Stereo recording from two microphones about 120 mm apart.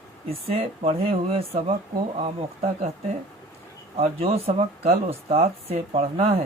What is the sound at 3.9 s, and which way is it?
Speech, 55° right (ahead or behind).